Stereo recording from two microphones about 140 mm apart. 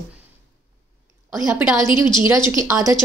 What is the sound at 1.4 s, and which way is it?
Speech, 10° right (ahead or behind).